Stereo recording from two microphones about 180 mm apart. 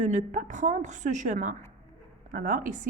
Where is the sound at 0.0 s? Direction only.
45° right (ahead or behind).